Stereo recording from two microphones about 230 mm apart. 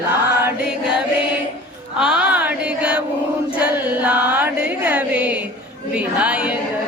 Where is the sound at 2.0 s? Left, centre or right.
Centre.